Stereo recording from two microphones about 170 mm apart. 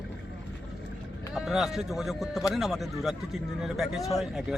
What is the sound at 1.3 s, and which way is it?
Speech, centre (ahead or behind).